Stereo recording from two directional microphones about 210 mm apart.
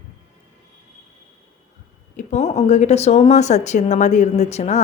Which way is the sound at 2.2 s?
35° left (ahead or behind).